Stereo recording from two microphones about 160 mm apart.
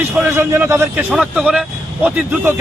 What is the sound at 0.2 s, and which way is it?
A man's voice, 15° right (ahead or behind).